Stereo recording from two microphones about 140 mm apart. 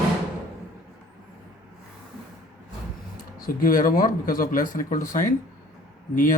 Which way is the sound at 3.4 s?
85° left.